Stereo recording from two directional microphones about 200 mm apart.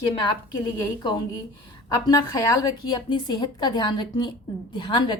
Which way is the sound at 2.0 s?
20° left (ahead or behind).